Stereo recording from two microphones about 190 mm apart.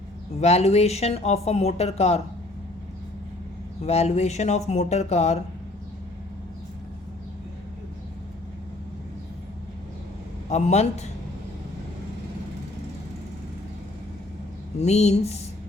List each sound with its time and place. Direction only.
0.3 s speech: 35° left (ahead or behind)
3.8 s speech: 35° left (ahead or behind)
10.5 s speech: 35° left (ahead or behind)
14.8 s speech: 35° left (ahead or behind)